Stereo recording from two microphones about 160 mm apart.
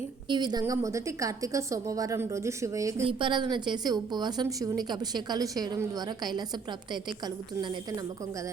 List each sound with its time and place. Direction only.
0.3 s a woman's voice: 25° right (ahead or behind)
3.1 s a woman's voice: 30° right (ahead or behind)
7.6 s a woman's voice: 25° right (ahead or behind)